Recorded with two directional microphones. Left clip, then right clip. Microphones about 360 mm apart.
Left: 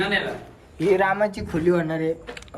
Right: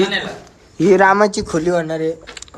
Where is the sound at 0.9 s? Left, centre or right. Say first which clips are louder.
Right 9 dB; right; by 2.4 s centre.